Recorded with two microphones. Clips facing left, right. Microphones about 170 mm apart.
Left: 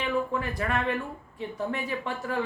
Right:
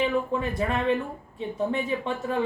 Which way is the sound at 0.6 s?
20° right (ahead or behind).